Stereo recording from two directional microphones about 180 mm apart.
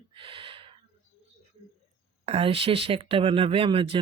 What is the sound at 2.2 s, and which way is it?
Speech, 30° right (ahead or behind).